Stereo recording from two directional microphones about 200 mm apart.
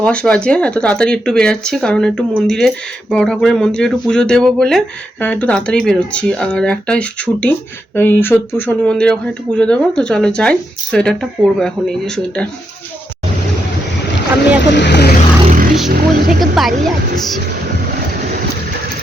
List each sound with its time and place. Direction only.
0.0 s speech: 5° left (ahead or behind)
14.6 s speech: 60° left (ahead or behind)
15.4 s vehicle: 45° right (ahead or behind)
15.9 s speech: 50° right (ahead or behind)
16.6 s speech: centre (ahead or behind)